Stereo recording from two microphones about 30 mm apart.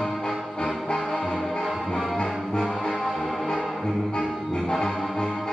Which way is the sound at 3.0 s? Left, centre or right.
Centre.